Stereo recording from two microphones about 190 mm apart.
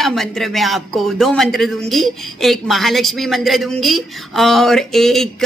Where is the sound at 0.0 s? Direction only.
Centre (ahead or behind).